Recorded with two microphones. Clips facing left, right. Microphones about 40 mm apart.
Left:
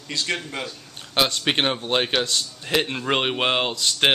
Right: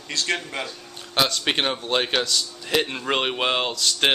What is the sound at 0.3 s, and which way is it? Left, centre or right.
Speech, centre.